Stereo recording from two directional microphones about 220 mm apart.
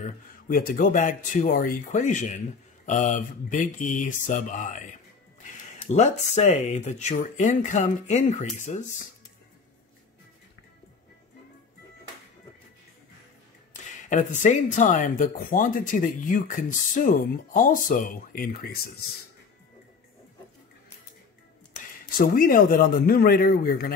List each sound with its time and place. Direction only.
0.0 s speech: 40° left (ahead or behind)
5.9 s speech: 30° left (ahead or behind)
14.0 s speech: 35° left (ahead or behind)
22.1 s speech: 40° left (ahead or behind)